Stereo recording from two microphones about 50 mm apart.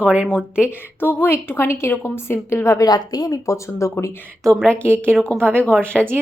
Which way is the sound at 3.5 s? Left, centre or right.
Left.